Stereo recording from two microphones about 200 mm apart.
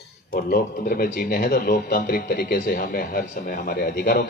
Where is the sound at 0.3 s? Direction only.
50° left (ahead or behind).